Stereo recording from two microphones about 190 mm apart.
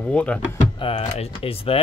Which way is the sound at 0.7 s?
25° left (ahead or behind).